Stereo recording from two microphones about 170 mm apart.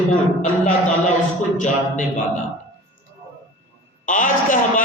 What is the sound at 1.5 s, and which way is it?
Speech, 50° left (ahead or behind).